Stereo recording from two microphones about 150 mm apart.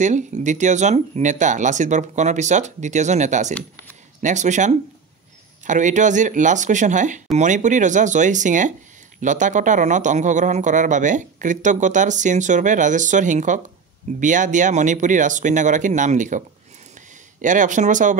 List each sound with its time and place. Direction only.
0.0 s speech: 50° right (ahead or behind)